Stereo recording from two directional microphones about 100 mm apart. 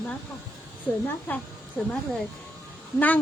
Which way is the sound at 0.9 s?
15° left (ahead or behind).